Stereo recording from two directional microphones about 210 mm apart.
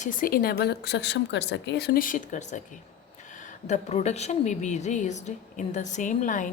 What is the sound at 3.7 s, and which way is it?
A woman's voice, 30° left (ahead or behind).